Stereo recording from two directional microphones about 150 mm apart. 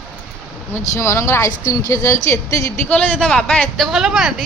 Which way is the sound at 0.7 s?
20° left (ahead or behind).